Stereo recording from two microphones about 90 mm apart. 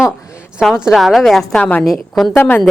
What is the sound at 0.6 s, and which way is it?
Speech, 5° right (ahead or behind).